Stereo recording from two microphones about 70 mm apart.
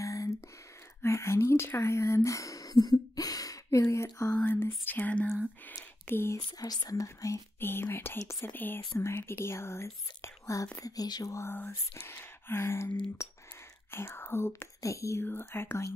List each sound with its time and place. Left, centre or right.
0.0 s a sound: left
1.0 s speech: left
3.8 s speech: left
4.3 s speech: left
6.8 s speech: left
7.6 s speech: left
8.5 s speech: left
8.9 s speech: left
11.1 s a sound: left
12.1 s speech: left
14.8 s speech: left
15.2 s speech: left